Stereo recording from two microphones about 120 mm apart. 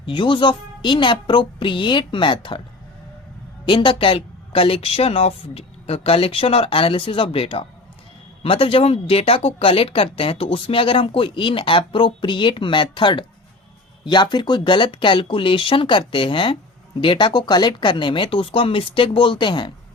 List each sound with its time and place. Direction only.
0.0 s speech: 45° left (ahead or behind)
3.7 s speech: 45° left (ahead or behind)